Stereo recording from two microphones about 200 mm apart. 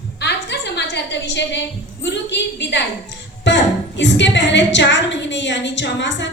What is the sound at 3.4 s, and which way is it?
A woman's voice, 65° left (ahead or behind).